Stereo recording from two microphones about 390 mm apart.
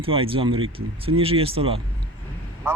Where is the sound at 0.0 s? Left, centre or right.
Centre.